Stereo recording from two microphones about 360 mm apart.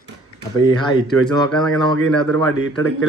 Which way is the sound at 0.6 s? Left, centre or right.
Centre.